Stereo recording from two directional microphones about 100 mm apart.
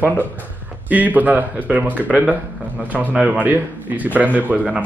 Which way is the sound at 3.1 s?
5° right (ahead or behind).